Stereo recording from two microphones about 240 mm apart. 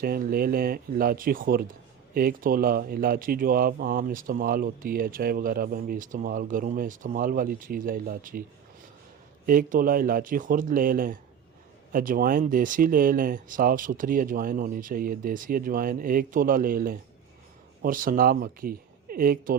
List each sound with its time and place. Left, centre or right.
0.0 s speech: right
9.5 s speech: right